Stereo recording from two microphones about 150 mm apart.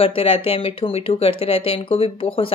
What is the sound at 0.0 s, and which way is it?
Speech, 40° left (ahead or behind).